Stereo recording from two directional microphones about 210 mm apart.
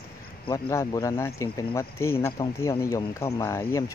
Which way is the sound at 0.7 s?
15° left (ahead or behind).